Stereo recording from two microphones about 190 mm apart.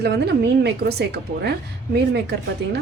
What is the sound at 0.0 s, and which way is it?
A woman's voice, 60° right (ahead or behind).